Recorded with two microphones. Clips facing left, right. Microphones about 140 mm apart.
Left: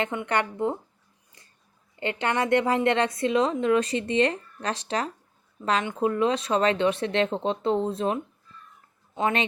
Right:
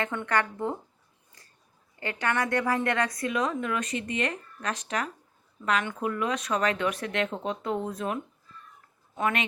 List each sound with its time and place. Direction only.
0.0 s a woman's voice: 20° left (ahead or behind)
2.0 s a woman's voice: 25° left (ahead or behind)